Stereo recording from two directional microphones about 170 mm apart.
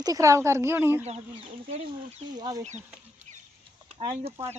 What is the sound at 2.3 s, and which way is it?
Speech, 25° right (ahead or behind).